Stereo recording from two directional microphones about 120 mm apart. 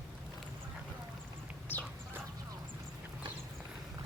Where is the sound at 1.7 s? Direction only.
15° left (ahead or behind).